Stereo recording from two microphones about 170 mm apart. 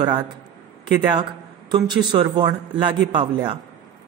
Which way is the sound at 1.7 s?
25° right (ahead or behind).